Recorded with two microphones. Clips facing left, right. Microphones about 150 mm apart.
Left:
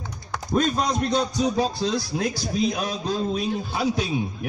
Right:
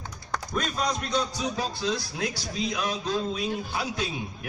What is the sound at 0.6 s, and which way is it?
A man's voice, 40° left (ahead or behind).